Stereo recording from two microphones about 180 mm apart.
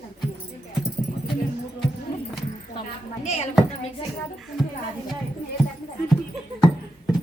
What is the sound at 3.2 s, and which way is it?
Speech, 40° left (ahead or behind).